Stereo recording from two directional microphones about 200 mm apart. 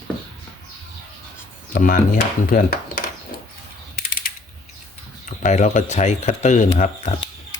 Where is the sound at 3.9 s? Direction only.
45° left (ahead or behind).